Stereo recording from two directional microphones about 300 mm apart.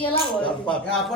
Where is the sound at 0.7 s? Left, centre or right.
Centre.